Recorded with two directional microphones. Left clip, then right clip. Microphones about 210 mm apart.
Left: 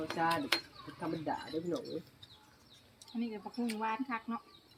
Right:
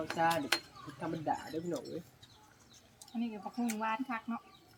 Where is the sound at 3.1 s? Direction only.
15° right (ahead or behind).